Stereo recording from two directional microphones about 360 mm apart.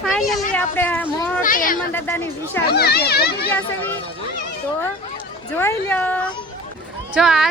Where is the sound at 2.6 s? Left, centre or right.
Left.